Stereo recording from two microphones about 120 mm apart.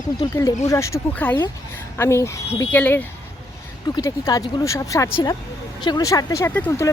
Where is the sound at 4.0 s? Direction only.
30° left (ahead or behind).